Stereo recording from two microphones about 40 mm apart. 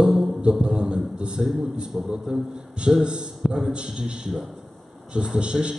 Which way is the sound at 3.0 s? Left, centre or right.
Centre.